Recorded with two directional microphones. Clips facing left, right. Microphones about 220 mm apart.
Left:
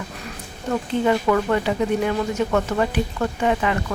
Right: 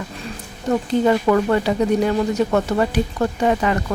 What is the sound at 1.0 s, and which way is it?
Speech, 40° right (ahead or behind).